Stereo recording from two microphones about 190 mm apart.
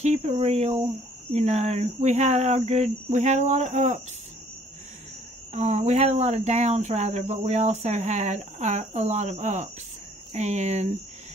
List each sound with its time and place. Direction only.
0.0 s speech: 35° right (ahead or behind)
5.5 s speech: 35° right (ahead or behind)